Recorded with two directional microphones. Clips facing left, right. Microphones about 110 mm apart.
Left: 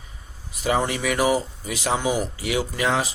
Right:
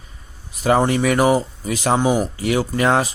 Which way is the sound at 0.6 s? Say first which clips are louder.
Right 6 dB; 45° right (ahead or behind).